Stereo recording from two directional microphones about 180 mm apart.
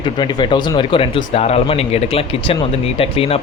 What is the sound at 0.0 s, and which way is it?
Speech, 25° left (ahead or behind).